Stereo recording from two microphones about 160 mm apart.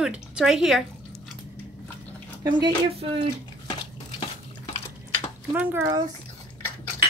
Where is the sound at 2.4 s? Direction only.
25° right (ahead or behind).